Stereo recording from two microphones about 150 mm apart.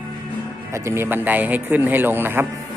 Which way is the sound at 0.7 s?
15° right (ahead or behind).